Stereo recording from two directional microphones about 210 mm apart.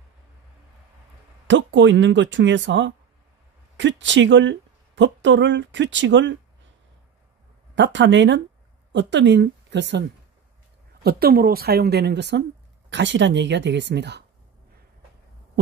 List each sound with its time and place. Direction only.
1.5 s a woman's voice: 60° right (ahead or behind)
7.7 s speech: 60° right (ahead or behind)